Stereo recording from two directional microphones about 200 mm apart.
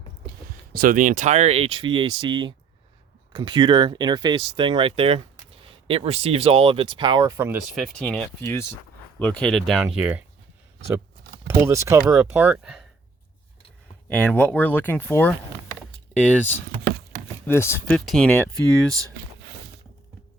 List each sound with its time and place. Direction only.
0.3 s speech: 45° right (ahead or behind); by 7.6 s 10° right (ahead or behind)
7.8 s speech: 5° left (ahead or behind)
11.4 s speech: 15° right (ahead or behind)
14.1 s speech: 10° left (ahead or behind)
17.4 s speech: 10° left (ahead or behind)